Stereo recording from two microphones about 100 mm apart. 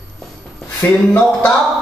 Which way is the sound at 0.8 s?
20° left (ahead or behind).